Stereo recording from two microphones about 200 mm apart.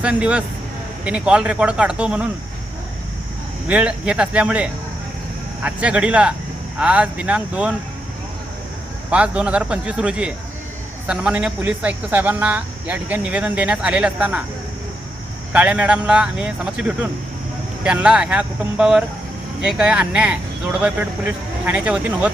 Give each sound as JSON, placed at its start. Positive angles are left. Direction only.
{"t": 0.0, "sound": "speech", "side_deg": -5}
{"t": 3.7, "sound": "speech", "side_deg": -5}
{"t": 9.0, "sound": "speech", "side_deg": -5}
{"t": 15.5, "sound": "speech", "side_deg": -5}